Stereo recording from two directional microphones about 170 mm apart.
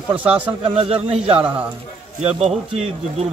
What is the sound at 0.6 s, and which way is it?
A man's voice, 35° right (ahead or behind).